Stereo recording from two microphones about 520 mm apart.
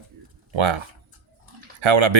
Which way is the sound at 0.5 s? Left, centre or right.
Right.